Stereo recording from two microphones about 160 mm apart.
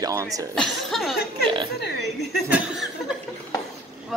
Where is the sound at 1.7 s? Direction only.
90° left.